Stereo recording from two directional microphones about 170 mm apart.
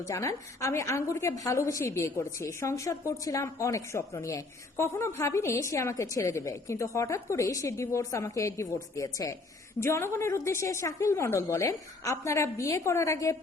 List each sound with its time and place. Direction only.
0.0 s a woman's voice: 15° left (ahead or behind)